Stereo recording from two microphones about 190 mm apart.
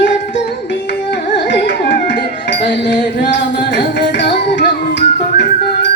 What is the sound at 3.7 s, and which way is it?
Music, 65° left (ahead or behind).